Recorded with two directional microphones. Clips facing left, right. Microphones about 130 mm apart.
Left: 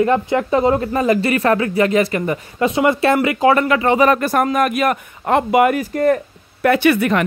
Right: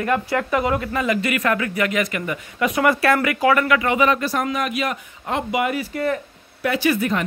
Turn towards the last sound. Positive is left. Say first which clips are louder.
# left 5 dB
turn(degrees=70)  # may be behind; listen again after turning